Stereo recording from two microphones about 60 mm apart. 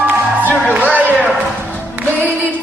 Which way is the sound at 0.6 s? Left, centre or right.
Right.